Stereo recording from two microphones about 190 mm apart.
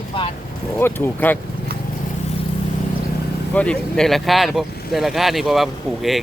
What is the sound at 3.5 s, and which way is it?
Speech, 5° left (ahead or behind).